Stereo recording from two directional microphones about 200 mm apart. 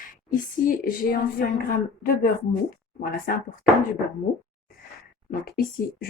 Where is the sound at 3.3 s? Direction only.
50° left (ahead or behind).